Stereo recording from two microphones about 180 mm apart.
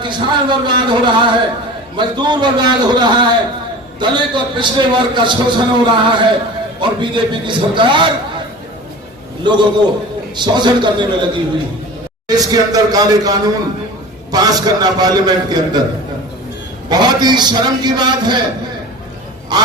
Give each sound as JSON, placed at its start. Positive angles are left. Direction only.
{"t": 0.0, "sound": "a man's voice", "side_deg": -25}
{"t": 9.4, "sound": "a man's voice", "side_deg": -25}
{"t": 12.3, "sound": "a man's voice", "side_deg": -20}
{"t": 16.9, "sound": "a man's voice", "side_deg": -25}
{"t": 19.5, "sound": "a man's voice", "side_deg": -25}